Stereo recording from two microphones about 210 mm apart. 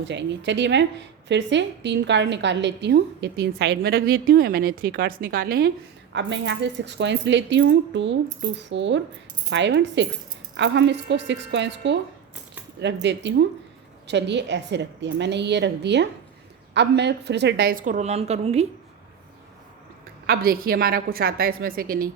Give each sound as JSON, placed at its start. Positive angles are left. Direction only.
{"t": 0.0, "sound": "a woman's voice", "side_deg": -55}
{"t": 20.2, "sound": "a woman's voice", "side_deg": -45}